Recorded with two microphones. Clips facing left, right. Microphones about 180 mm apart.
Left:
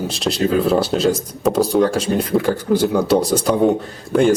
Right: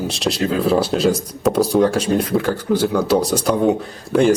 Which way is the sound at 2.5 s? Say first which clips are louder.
Left 1 dB; 10° left (ahead or behind).